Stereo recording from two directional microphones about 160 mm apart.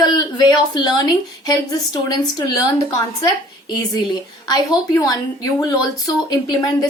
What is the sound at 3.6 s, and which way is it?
Speech, 25° left (ahead or behind).